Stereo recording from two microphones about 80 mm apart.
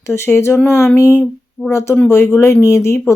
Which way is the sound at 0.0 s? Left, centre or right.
Left.